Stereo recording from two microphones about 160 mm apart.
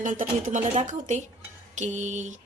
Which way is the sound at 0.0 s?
55° right (ahead or behind).